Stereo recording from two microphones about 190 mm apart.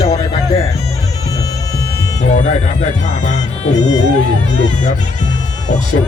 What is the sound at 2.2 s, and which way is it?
Speech, 40° left (ahead or behind).